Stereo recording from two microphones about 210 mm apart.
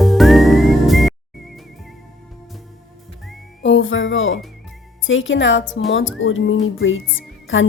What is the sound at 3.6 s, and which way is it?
Music, 60° left (ahead or behind).